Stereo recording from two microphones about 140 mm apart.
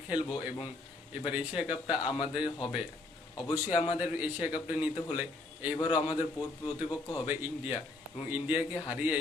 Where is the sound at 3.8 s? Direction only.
10° right (ahead or behind).